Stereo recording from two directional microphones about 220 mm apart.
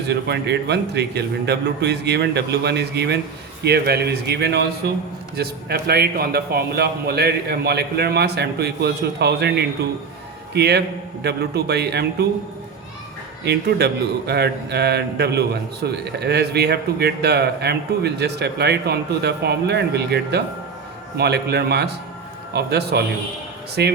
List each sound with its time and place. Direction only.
0.1 s a man's voice: 50° right (ahead or behind)
13.4 s a man's voice: 50° right (ahead or behind)